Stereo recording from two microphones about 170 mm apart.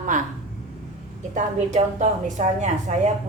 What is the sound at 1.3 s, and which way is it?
A woman's voice, 45° right (ahead or behind).